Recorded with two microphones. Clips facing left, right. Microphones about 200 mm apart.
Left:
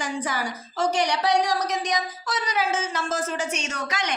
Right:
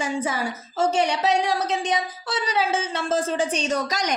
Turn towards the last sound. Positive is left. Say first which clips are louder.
# right 5 dB
turn(degrees=-40)  # may be behind; listen again after turning